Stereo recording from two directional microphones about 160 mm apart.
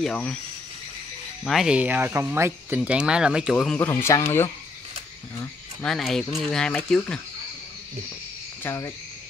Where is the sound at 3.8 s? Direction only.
15° left (ahead or behind).